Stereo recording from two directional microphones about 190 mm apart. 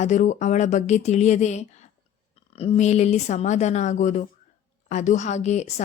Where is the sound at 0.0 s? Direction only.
40° left (ahead or behind).